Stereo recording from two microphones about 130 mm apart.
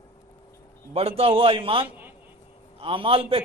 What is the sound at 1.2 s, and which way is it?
Speech, 45° right (ahead or behind).